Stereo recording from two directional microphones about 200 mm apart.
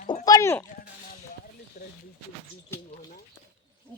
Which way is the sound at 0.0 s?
40° left (ahead or behind).